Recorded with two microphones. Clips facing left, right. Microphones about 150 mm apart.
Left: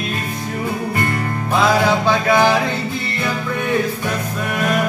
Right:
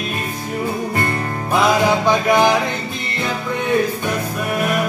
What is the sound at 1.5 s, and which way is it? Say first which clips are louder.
Music: even; 15° right (ahead or behind).